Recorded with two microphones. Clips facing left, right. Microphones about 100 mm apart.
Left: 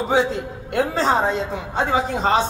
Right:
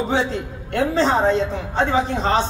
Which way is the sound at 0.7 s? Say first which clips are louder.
Right 1 dB; 10° left (ahead or behind).